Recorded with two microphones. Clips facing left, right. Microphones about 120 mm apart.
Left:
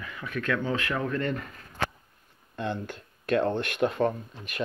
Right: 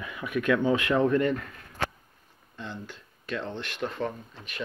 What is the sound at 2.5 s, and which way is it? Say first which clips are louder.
Speech: left 7 dB; 60° left (ahead or behind).